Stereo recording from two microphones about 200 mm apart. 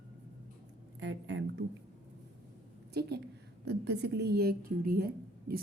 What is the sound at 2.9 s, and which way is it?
A woman's voice, 55° right (ahead or behind).